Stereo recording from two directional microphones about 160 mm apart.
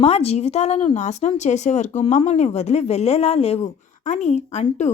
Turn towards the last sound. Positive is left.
turn(degrees=45)  # may be behind; listen again after turning